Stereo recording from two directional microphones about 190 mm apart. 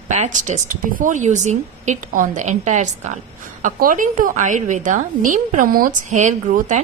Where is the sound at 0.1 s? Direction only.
40° right (ahead or behind).